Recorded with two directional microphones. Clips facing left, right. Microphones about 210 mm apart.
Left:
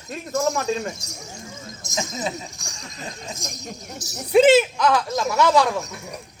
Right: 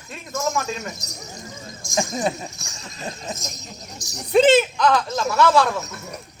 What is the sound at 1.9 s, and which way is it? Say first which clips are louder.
Speech: right 5 dB; 55° right (ahead or behind).